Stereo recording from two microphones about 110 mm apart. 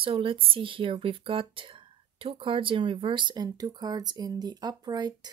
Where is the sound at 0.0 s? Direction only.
55° right (ahead or behind).